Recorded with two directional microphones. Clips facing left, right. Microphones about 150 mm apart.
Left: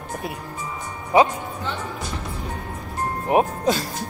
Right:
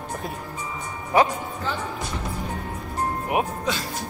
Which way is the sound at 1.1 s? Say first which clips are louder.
Left 3 dB; 20° left (ahead or behind).